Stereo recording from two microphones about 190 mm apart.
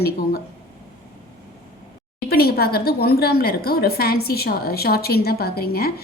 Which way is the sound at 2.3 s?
55° left (ahead or behind).